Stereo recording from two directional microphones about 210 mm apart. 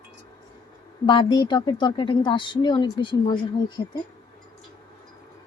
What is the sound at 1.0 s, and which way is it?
A woman's voice, 20° left (ahead or behind).